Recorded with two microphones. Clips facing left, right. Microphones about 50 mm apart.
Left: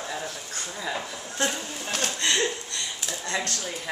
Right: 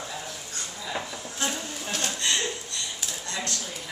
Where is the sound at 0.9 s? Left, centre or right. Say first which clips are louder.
Right 1 dB; centre.